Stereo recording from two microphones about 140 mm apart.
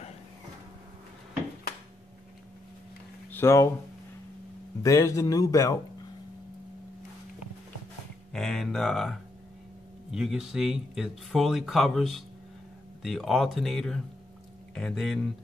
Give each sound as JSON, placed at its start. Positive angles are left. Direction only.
{"t": 3.3, "sound": "speech", "side_deg": 15}
{"t": 4.8, "sound": "speech", "side_deg": 25}
{"t": 8.3, "sound": "speech", "side_deg": 5}